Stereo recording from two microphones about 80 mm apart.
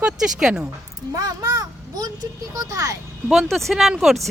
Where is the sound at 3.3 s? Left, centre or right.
Centre.